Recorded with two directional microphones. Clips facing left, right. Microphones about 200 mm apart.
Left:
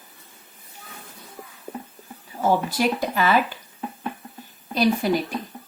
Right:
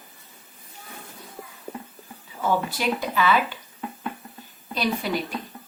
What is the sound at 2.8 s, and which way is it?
Speech, 45° left (ahead or behind).